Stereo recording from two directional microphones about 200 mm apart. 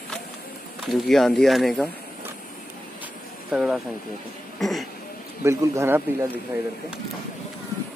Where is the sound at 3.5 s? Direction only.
5° right (ahead or behind).